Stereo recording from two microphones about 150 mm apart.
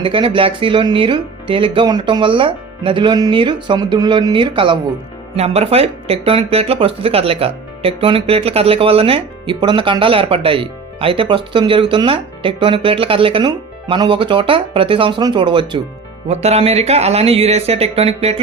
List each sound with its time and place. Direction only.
0.0 s speech: 35° right (ahead or behind)
5.4 s speech: 45° right (ahead or behind)
16.3 s speech: 45° right (ahead or behind)